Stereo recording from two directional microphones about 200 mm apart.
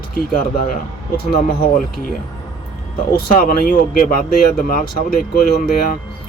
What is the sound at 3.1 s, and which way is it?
Speech, 45° left (ahead or behind).